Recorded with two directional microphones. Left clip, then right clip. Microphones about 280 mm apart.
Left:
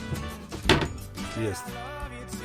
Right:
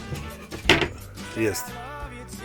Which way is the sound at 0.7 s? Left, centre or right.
Centre.